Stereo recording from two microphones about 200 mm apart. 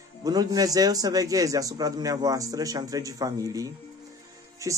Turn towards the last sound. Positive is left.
turn(degrees=-15)  # may be behind; listen again after turning